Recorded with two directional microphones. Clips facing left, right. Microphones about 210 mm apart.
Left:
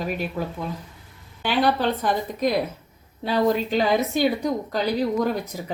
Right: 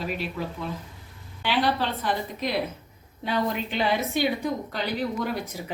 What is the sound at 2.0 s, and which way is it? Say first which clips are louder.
A woman's voice: left 5 dB; 45° left (ahead or behind).